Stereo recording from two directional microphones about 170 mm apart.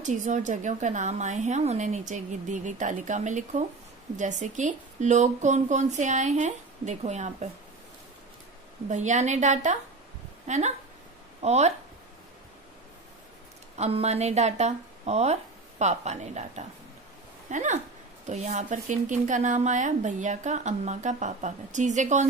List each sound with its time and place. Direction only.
0.0 s speech: 45° right (ahead or behind)
8.8 s speech: 45° right (ahead or behind)
13.7 s speech: 40° right (ahead or behind)